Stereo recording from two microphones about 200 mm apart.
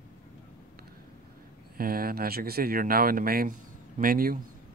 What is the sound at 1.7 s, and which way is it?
Speech, 45° right (ahead or behind).